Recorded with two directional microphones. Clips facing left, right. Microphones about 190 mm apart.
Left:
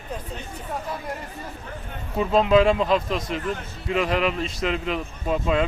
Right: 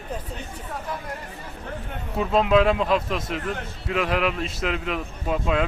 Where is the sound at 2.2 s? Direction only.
Centre (ahead or behind).